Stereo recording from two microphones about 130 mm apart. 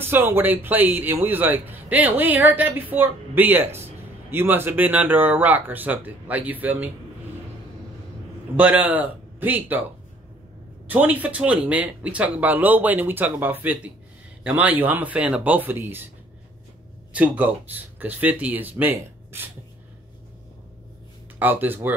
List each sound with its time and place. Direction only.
0.0 s a man's voice: 15° right (ahead or behind)
8.5 s a man's voice: 10° right (ahead or behind)
10.9 s a man's voice: 10° right (ahead or behind)
17.1 s a man's voice: 10° right (ahead or behind)
21.4 s a man's voice: 15° right (ahead or behind)